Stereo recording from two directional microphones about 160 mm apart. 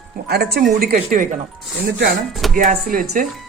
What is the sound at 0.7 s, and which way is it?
Speech, 70° right (ahead or behind).